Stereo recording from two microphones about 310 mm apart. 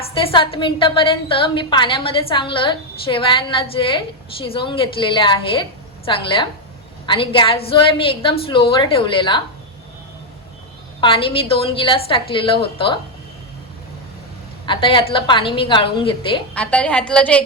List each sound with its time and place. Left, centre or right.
0.1 s a woman's voice: centre
11.0 s a woman's voice: centre
14.7 s a woman's voice: centre
16.6 s a woman's voice: centre